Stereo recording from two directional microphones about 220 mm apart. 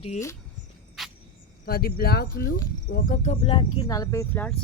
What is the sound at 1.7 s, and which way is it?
Speech, 45° left (ahead or behind).